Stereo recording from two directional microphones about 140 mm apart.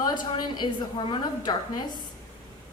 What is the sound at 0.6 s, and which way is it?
A woman's voice, 40° left (ahead or behind).